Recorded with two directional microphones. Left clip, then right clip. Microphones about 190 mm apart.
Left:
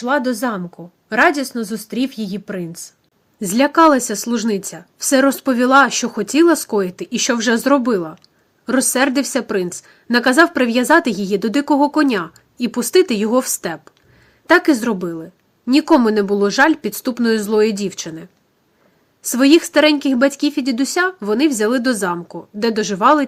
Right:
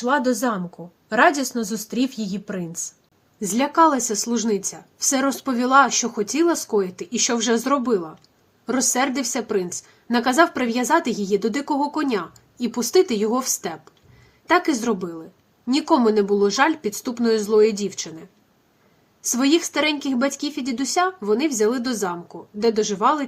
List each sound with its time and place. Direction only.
0.0 s a woman's voice: 20° left (ahead or behind)